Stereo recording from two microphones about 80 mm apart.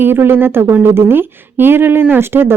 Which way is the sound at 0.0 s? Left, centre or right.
Right.